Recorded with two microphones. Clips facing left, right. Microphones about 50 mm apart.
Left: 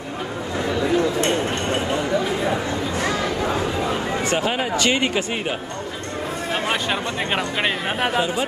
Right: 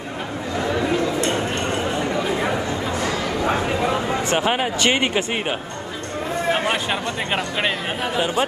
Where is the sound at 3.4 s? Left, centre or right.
Right.